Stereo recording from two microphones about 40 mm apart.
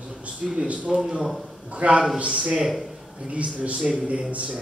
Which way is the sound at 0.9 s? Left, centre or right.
Centre.